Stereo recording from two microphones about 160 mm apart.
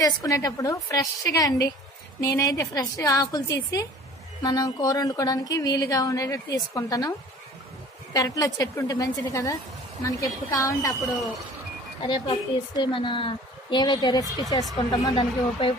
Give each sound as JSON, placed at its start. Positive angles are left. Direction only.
{"t": 0.0, "sound": "speech", "side_deg": 20}
{"t": 12.0, "sound": "speech", "side_deg": 30}